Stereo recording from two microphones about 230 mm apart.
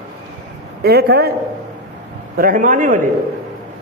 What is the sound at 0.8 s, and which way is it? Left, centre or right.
Speech, right.